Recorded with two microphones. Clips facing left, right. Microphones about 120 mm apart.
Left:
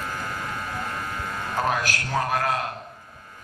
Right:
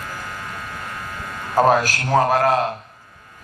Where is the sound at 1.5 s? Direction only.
40° right (ahead or behind).